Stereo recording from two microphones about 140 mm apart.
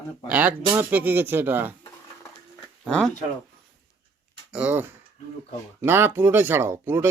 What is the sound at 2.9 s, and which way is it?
Speech, 5° left (ahead or behind).